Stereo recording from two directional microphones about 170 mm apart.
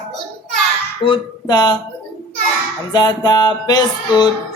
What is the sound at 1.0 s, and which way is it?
Music, 25° left (ahead or behind).